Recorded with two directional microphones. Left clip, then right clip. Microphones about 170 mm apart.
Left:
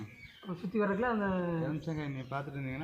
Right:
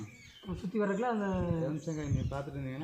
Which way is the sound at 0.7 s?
25° right (ahead or behind).